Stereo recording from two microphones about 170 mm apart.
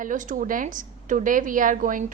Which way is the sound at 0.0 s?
50° right (ahead or behind).